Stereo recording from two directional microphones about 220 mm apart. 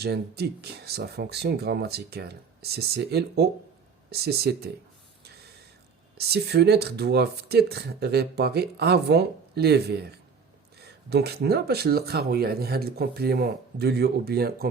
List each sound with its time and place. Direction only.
0.0 s speech: 45° right (ahead or behind)
6.1 s speech: 45° right (ahead or behind)